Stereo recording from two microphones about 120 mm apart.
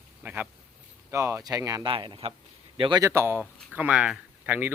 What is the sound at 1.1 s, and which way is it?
Speech, 25° right (ahead or behind).